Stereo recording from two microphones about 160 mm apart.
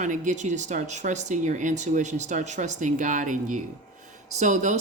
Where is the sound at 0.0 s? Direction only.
50° right (ahead or behind).